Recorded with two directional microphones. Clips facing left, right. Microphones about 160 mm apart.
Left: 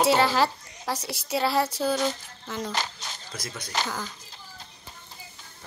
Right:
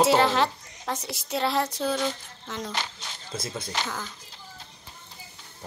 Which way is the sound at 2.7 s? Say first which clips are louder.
Left 2 dB; 40° left (ahead or behind).